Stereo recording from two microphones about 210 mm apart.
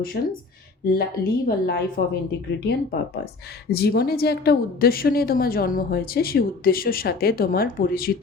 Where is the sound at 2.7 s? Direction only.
50° left (ahead or behind).